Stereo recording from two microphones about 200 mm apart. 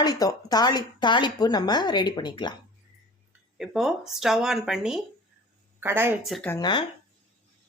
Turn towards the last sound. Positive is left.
turn(degrees=20)  # may be behind; listen again after turning